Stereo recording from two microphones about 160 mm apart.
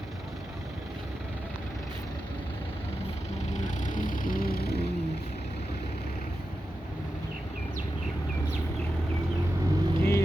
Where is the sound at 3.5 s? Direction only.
50° left (ahead or behind); by 4.9 s 85° left.